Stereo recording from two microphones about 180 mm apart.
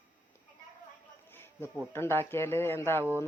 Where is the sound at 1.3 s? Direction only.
10° left (ahead or behind).